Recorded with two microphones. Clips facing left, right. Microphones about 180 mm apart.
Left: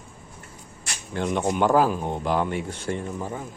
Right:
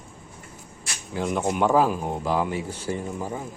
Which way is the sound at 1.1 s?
5° right (ahead or behind).